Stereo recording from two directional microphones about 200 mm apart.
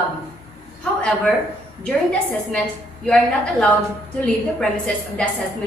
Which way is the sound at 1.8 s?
5° left (ahead or behind).